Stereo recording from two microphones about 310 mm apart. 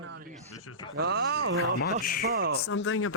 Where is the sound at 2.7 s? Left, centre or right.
Left.